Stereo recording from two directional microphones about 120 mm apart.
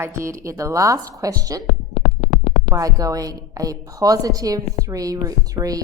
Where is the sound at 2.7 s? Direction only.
30° right (ahead or behind).